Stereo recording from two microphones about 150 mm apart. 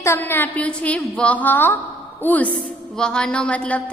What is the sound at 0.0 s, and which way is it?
A woman's voice, 15° left (ahead or behind).